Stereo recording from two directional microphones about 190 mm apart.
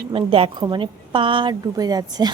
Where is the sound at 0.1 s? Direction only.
30° right (ahead or behind).